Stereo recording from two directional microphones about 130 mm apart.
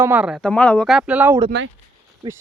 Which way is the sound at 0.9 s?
10° right (ahead or behind).